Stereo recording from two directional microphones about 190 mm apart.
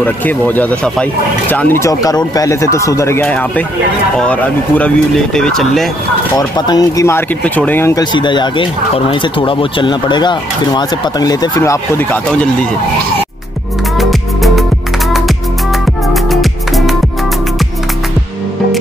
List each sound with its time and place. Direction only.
0.0 s speech: 10° left (ahead or behind)
6.3 s speech: 20° left (ahead or behind)
13.9 s music: centre (ahead or behind)
16.1 s music: centre (ahead or behind)